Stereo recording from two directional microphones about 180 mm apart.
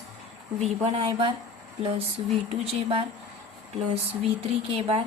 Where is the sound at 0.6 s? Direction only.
35° right (ahead or behind).